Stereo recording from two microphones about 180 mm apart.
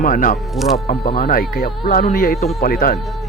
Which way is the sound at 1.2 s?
50° left (ahead or behind).